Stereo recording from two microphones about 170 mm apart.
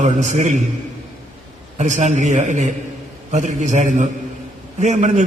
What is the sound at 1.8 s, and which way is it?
A man's voice, 45° right (ahead or behind).